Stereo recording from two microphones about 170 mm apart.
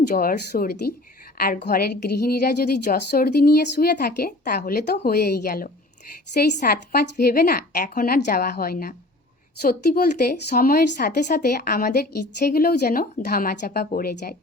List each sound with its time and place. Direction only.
0.1 s a woman's voice: 55° left (ahead or behind)
6.5 s a woman's voice: 45° left (ahead or behind)
6.9 s a woman's voice: 65° left (ahead or behind)